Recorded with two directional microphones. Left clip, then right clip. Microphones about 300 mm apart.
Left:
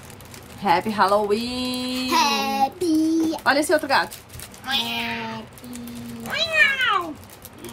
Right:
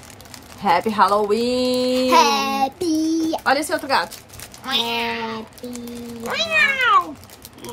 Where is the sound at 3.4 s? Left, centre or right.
Centre.